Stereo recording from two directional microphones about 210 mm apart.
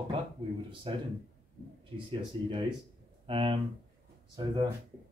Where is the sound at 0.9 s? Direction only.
25° right (ahead or behind).